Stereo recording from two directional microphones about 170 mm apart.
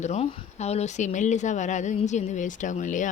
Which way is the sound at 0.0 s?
40° left (ahead or behind).